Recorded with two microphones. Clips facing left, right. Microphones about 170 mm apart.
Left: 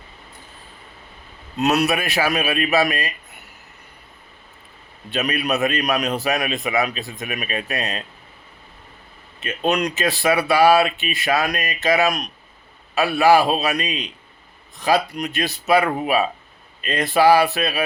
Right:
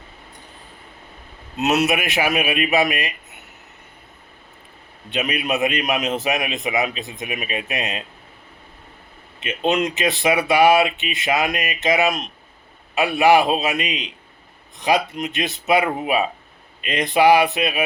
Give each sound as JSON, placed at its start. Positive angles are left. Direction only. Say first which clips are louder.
{"t": 1.5, "sound": "a man's voice", "louder": "even", "side_deg": -20}
{"t": 5.1, "sound": "a man's voice", "louder": "left 1 dB", "side_deg": -20}
{"t": 9.6, "sound": "a man's voice", "louder": "right 1 dB", "side_deg": -25}